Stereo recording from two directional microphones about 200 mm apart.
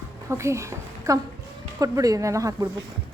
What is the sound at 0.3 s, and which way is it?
Speech, 15° right (ahead or behind).